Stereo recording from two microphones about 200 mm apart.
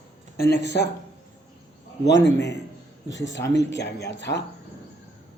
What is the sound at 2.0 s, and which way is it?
A man's voice, 60° left (ahead or behind).